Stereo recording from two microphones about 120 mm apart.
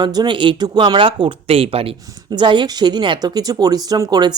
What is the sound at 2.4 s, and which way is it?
Speech, 40° right (ahead or behind).